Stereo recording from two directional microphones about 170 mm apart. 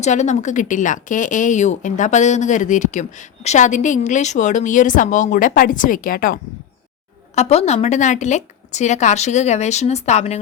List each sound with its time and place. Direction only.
0.0 s speech: 45° left (ahead or behind)
7.3 s a woman's voice: 40° left (ahead or behind)